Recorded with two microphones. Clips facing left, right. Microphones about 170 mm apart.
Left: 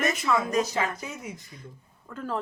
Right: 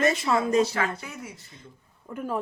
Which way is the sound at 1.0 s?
20° left (ahead or behind).